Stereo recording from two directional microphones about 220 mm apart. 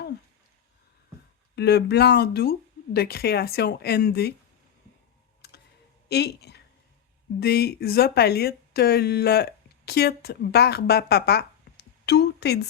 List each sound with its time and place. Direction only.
1.5 s speech: 50° left (ahead or behind)
5.4 s clicking: 50° left (ahead or behind)
6.1 s a woman's voice: 50° left (ahead or behind)